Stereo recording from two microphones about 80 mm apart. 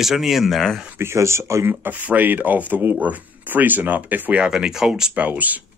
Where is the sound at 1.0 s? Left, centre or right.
Right.